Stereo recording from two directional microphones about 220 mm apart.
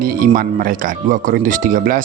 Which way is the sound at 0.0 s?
40° right (ahead or behind).